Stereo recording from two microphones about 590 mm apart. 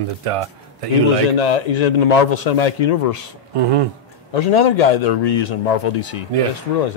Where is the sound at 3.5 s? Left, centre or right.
Right.